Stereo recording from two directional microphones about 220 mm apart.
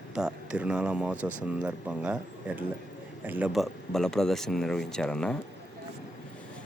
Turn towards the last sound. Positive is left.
turn(degrees=5)  # may be behind; listen again after turning